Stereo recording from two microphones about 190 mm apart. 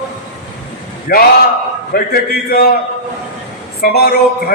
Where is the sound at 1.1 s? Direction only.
50° left (ahead or behind).